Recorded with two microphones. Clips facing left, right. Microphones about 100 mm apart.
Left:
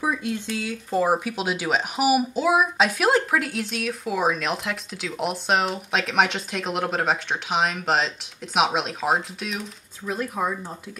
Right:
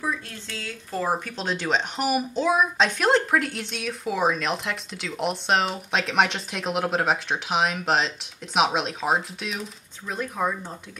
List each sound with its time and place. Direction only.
0.0 s speech: 15° left (ahead or behind)